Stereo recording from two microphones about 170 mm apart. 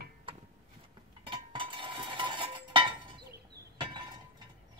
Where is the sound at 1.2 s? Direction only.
30° right (ahead or behind).